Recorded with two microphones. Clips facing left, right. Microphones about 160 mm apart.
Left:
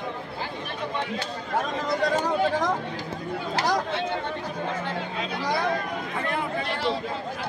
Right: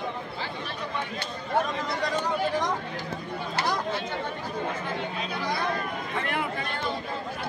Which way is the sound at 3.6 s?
90° left.